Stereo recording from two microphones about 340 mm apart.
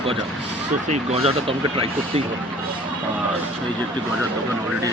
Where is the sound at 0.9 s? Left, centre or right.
Centre.